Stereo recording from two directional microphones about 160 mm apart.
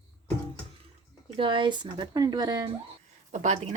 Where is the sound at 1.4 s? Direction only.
30° right (ahead or behind).